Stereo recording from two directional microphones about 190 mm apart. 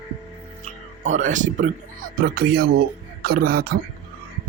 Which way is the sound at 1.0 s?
40° right (ahead or behind).